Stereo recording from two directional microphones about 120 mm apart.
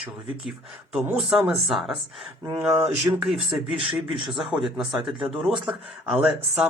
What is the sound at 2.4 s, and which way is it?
Speech, 20° right (ahead or behind).